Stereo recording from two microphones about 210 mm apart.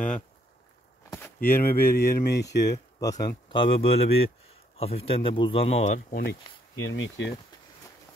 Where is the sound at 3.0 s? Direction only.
15° left (ahead or behind); by 6.3 s 40° left (ahead or behind).